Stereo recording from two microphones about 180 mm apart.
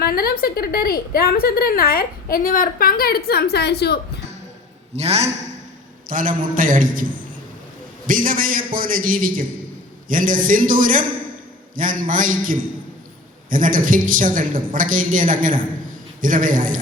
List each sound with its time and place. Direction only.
0.0 s a woman's voice: 55° left (ahead or behind)
4.9 s a man's voice: 35° right (ahead or behind)
6.1 s a woman's voice: 50° right (ahead or behind)